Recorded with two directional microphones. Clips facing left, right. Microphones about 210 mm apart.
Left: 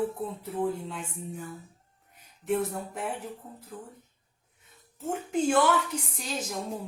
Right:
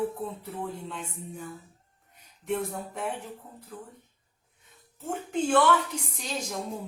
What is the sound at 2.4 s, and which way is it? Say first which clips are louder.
Music: left 2 dB; 5° left (ahead or behind).